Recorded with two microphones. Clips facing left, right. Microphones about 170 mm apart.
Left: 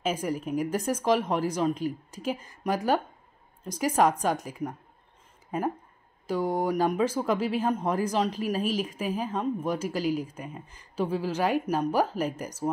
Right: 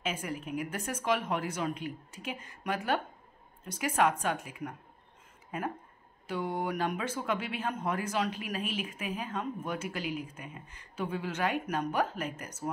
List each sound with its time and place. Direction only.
0.0 s speech: 40° left (ahead or behind)
6.2 s speech: 40° left (ahead or behind)